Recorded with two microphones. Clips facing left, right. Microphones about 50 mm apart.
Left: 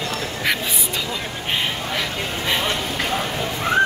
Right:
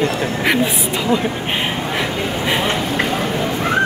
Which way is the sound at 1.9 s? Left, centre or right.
Centre.